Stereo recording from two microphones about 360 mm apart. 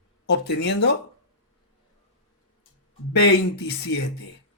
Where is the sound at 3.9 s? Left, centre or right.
Left.